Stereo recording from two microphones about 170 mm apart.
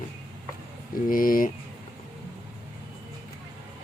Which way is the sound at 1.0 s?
55° left (ahead or behind).